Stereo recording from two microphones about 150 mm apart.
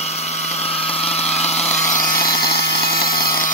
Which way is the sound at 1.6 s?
10° left (ahead or behind).